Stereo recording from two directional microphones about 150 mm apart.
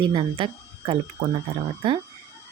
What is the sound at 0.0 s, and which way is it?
Speech, 35° right (ahead or behind).